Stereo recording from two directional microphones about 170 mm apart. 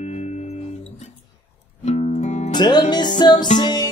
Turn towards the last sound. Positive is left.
turn(degrees=25)  # may be behind; listen again after turning